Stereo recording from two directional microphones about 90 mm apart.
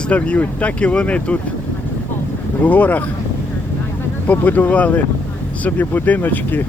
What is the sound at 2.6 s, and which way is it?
Speech, 20° left (ahead or behind).